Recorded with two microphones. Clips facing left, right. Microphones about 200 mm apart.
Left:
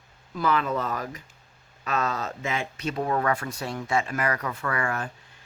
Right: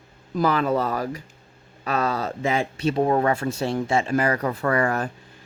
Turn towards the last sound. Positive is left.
turn(degrees=-40)  # may be behind; listen again after turning